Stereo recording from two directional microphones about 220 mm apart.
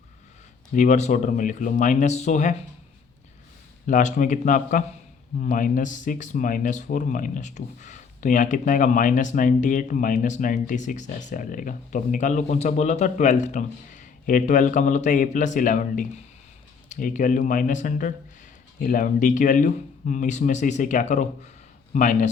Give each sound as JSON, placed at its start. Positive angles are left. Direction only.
{"t": 0.7, "sound": "speech", "side_deg": 35}
{"t": 3.8, "sound": "speech", "side_deg": 35}